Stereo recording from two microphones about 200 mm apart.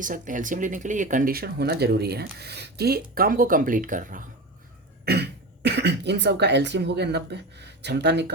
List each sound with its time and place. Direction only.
0.0 s speech: 40° right (ahead or behind)
5.0 s speech: 55° right (ahead or behind)